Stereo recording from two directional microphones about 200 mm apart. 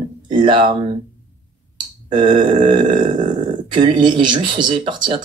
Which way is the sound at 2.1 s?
20° right (ahead or behind).